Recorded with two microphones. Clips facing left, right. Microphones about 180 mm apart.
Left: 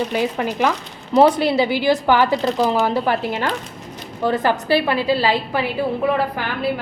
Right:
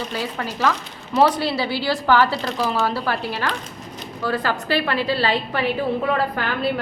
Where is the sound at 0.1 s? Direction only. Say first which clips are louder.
Left 6 dB; 20° left (ahead or behind).